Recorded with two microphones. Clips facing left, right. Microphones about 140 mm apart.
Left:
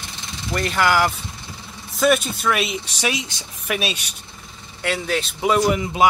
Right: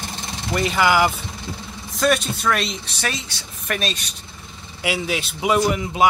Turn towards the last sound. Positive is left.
turn(degrees=-5)  # may be behind; listen again after turning